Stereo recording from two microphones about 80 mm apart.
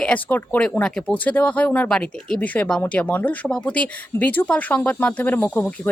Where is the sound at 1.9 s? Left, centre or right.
Centre.